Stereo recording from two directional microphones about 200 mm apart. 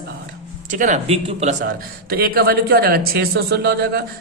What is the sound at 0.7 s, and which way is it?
A man's voice, 40° right (ahead or behind).